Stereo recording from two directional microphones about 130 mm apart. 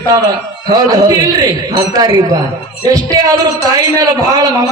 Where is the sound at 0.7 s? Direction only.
30° right (ahead or behind).